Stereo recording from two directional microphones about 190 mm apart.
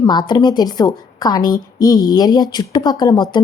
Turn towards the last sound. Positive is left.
turn(degrees=20)  # may be behind; listen again after turning